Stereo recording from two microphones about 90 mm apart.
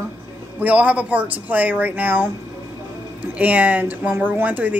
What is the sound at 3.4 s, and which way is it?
A woman's voice, 15° right (ahead or behind).